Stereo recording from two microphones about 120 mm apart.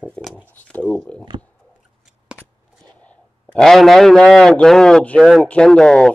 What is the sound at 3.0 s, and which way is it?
A man's voice, 5° left (ahead or behind).